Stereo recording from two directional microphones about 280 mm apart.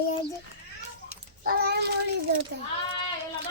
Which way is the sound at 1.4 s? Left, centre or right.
Right.